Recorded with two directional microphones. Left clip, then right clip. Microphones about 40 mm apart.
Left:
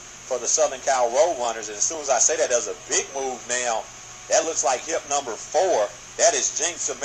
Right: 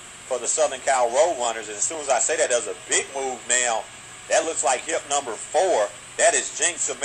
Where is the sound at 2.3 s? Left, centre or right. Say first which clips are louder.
Even; right.